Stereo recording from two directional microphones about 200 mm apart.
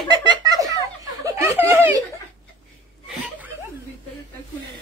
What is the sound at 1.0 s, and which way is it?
Chuckle, 15° right (ahead or behind).